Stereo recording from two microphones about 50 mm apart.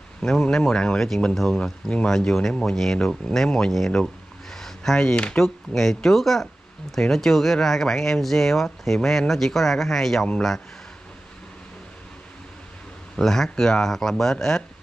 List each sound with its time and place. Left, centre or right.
0.2 s speech: centre
1.5 s speech: centre
2.0 s speech: centre
3.9 s a sound: centre
5.8 s speech: centre
13.1 s speech: centre